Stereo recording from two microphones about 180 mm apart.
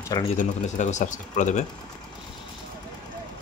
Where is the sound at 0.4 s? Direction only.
40° left (ahead or behind).